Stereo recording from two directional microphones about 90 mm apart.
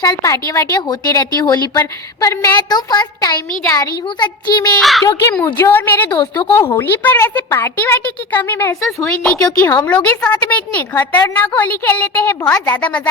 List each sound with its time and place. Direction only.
0.0 s a woman's voice: 40° left (ahead or behind)
0.8 s a woman's voice: 50° left (ahead or behind)
4.8 s a child's voice: centre (ahead or behind)
5.4 s a woman's voice: 20° left (ahead or behind)
6.1 s a woman's voice: 55° left (ahead or behind)
6.7 s a woman's voice: 25° left (ahead or behind)
9.0 s a woman's voice: 10° left (ahead or behind)